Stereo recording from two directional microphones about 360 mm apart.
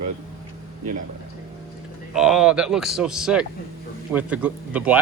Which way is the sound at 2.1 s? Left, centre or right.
Centre.